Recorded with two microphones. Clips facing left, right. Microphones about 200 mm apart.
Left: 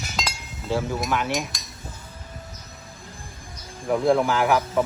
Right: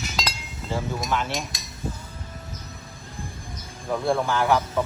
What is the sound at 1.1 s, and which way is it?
Speech, 10° left (ahead or behind).